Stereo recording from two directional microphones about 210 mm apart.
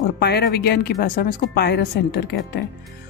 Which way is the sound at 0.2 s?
50° left (ahead or behind).